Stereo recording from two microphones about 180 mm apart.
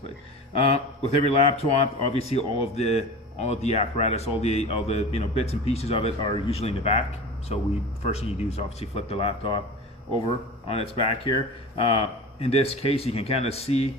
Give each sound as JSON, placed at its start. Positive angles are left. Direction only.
{"t": 0.6, "sound": "speech", "side_deg": 35}
{"t": 8.0, "sound": "speech", "side_deg": 35}